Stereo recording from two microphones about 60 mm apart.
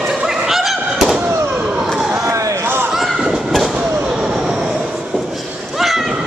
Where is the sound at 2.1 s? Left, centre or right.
Right.